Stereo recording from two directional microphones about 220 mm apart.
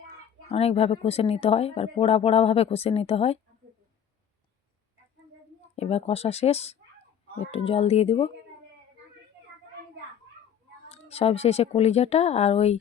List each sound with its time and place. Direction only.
0.4 s speech: 30° left (ahead or behind)
5.7 s speech: 30° left (ahead or behind)
10.8 s speech: 25° left (ahead or behind)